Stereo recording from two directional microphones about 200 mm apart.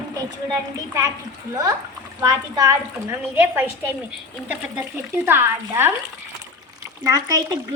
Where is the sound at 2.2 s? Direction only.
20° right (ahead or behind).